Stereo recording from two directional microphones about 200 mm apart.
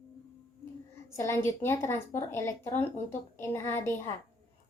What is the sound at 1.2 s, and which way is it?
A woman's voice, 15° left (ahead or behind).